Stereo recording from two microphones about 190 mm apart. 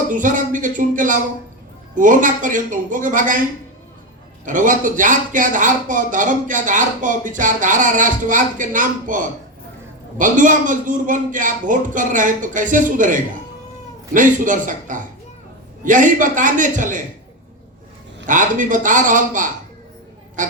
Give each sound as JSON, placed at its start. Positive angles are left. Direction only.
{"t": 0.1, "sound": "speech", "side_deg": -45}
{"t": 4.4, "sound": "speech", "side_deg": -45}
{"t": 18.3, "sound": "speech", "side_deg": -40}
{"t": 20.4, "sound": "goose", "side_deg": -45}